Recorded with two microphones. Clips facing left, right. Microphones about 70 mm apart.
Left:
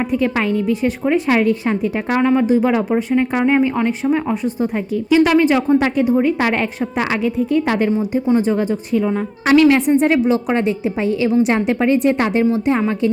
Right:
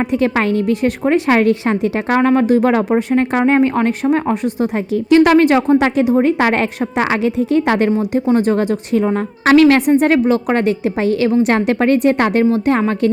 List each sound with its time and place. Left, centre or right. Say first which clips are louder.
0.1 s a woman's voice: right 2 dB; right
2.1 s a woman's voice: right 2 dB; right
5.2 s a woman's voice: right 2 dB; right
7.3 s a woman's voice: right 2 dB; right
8.3 s a woman's voice: right 2 dB; right
9.4 s a woman's voice: right 2 dB; right
10.0 s a woman's voice: right 2 dB; right